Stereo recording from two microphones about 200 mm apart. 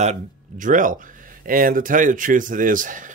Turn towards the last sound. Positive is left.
turn(degrees=-40)  # may be behind; listen again after turning